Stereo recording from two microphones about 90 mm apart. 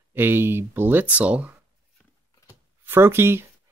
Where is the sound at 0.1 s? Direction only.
25° right (ahead or behind).